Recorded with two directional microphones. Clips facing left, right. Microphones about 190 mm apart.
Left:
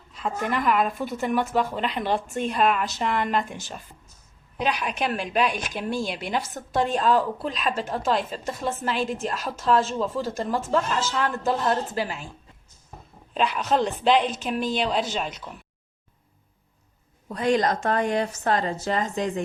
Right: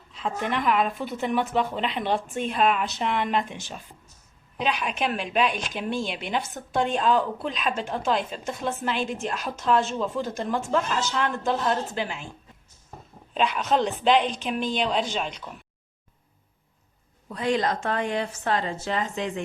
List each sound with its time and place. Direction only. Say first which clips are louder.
0.2 s speech: left 1 dB; centre (ahead or behind)
4.5 s speech: left 1 dB; centre (ahead or behind)
13.3 s speech: even; centre (ahead or behind)
17.2 s a woman's voice: left 3 dB; 45° left (ahead or behind)